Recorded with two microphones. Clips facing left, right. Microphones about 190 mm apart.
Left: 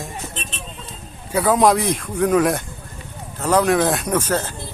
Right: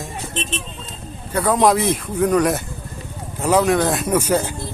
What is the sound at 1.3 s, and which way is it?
Speech, centre (ahead or behind).